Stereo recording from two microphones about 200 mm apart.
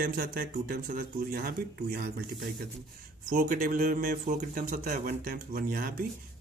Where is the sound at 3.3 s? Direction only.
40° right (ahead or behind).